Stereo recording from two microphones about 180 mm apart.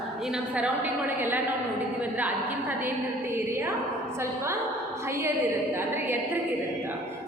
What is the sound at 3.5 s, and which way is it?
Speech, 15° right (ahead or behind).